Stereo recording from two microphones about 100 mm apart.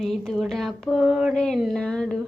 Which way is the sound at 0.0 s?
Centre (ahead or behind).